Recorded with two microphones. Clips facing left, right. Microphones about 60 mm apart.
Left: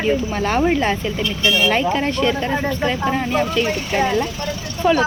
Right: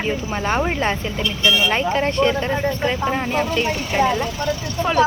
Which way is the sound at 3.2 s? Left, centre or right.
Centre.